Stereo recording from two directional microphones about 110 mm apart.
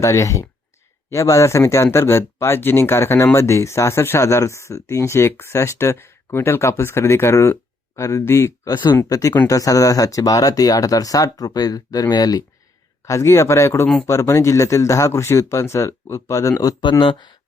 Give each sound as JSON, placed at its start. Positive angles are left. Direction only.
{"t": 0.0, "sound": "speech", "side_deg": 30}
{"t": 8.7, "sound": "speech", "side_deg": 45}
{"t": 9.0, "sound": "speech", "side_deg": 30}
{"t": 13.1, "sound": "speech", "side_deg": 25}
{"t": 17.0, "sound": "speech", "side_deg": 45}